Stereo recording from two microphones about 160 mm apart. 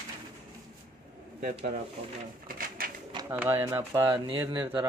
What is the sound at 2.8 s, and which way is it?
Pigeon, 65° right (ahead or behind).